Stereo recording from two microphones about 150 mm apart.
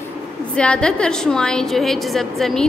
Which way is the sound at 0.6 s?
5° left (ahead or behind).